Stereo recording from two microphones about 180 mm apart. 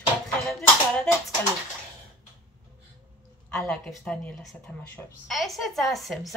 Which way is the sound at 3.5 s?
5° left (ahead or behind).